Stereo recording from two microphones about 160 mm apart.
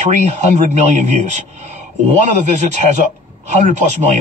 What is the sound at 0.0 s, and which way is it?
A man's voice, 45° right (ahead or behind).